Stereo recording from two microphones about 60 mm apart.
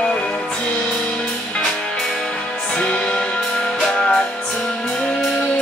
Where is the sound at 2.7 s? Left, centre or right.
Centre.